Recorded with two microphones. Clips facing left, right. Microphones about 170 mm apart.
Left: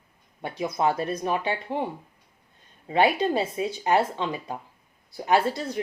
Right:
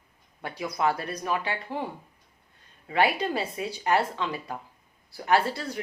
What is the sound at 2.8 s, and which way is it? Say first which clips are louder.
Speech: left 3 dB; 20° left (ahead or behind).